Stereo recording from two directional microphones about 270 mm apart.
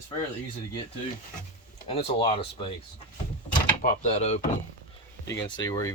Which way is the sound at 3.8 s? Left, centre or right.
Left.